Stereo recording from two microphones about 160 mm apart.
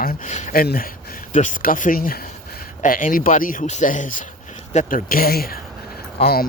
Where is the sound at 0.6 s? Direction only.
65° left (ahead or behind).